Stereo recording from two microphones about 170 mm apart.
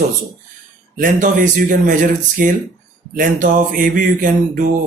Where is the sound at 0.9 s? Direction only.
55° right (ahead or behind).